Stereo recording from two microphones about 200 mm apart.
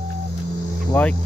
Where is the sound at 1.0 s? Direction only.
10° left (ahead or behind).